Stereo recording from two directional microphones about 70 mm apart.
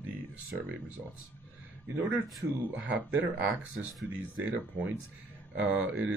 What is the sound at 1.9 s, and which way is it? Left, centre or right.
Speech, right.